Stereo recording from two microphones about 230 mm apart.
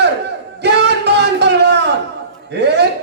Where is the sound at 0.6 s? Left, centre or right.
Right.